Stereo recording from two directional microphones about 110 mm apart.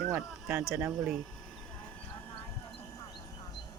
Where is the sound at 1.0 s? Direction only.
5° right (ahead or behind).